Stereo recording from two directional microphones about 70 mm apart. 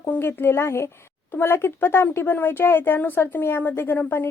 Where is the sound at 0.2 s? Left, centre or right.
Left.